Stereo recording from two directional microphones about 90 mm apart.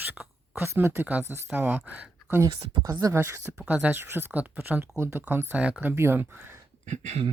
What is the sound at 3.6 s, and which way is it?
A woman's voice, 15° right (ahead or behind).